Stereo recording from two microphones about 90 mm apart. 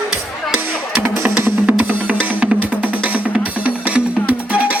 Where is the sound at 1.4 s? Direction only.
20° right (ahead or behind).